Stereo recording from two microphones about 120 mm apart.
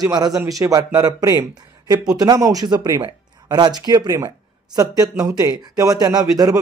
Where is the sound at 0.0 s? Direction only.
35° right (ahead or behind).